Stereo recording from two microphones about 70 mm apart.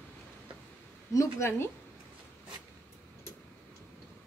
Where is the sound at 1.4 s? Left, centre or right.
Left.